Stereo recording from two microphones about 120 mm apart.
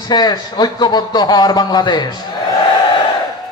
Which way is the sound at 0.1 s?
35° left (ahead or behind).